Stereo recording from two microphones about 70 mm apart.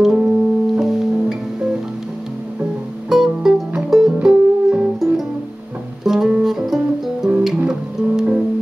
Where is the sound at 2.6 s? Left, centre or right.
Centre.